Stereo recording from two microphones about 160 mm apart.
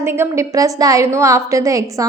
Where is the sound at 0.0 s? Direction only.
15° right (ahead or behind).